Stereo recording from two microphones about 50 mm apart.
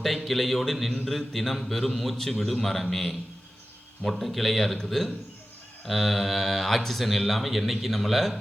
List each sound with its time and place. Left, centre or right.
0.0 s speech: centre